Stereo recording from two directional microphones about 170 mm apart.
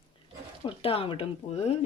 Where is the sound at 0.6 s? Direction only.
35° left (ahead or behind).